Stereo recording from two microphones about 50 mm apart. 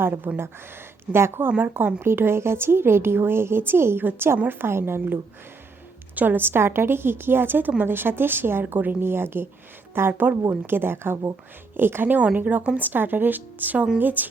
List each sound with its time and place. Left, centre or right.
0.3 s a woman's voice: right
1.5 s speech: right
2.0 s a woman's voice: right